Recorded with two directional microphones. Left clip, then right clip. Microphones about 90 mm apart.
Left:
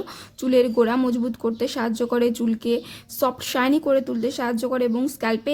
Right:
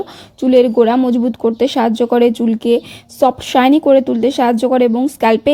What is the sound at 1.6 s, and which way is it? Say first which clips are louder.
Speech: right 12 dB; 70° right (ahead or behind).